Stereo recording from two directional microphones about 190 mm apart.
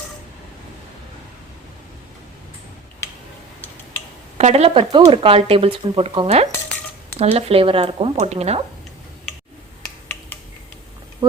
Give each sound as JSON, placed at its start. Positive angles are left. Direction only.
{"t": 4.4, "sound": "speech", "side_deg": -35}
{"t": 11.2, "sound": "speech", "side_deg": -25}